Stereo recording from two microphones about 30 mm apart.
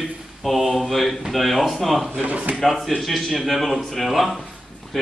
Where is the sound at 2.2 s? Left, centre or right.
Right.